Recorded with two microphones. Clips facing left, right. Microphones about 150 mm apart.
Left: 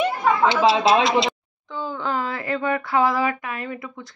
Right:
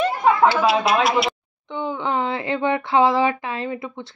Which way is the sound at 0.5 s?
25° left (ahead or behind).